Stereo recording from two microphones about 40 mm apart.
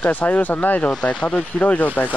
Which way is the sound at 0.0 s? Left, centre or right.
Left.